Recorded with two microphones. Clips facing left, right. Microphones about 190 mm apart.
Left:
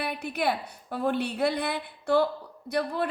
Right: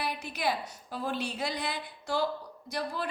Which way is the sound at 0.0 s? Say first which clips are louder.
Left 4 dB; 60° left (ahead or behind).